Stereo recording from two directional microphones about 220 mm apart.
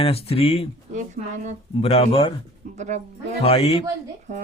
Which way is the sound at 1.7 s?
25° left (ahead or behind).